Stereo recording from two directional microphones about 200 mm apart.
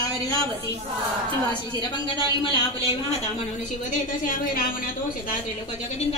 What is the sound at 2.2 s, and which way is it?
Speech, 25° left (ahead or behind).